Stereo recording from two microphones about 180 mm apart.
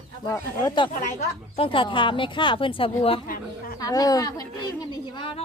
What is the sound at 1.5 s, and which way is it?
Speech, 30° left (ahead or behind).